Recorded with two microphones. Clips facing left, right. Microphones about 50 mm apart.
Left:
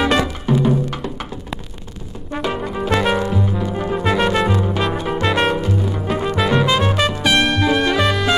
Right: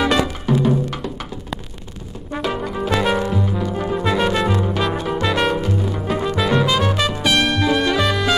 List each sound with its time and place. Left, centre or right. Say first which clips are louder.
0.0 s music: left 1 dB; centre
2.3 s brass instrument: left 1 dB; centre
4.5 s music: left 1 dB; centre
5.6 s music: left 1 dB; centre